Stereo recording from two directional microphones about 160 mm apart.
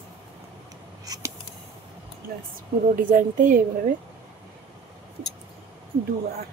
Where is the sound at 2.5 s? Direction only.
60° right (ahead or behind).